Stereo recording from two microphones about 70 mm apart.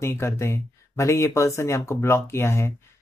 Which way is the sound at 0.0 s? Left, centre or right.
Left.